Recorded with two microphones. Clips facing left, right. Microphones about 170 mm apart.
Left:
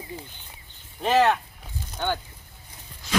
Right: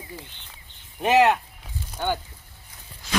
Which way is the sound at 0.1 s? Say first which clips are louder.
Left 2 dB; 20° left (ahead or behind).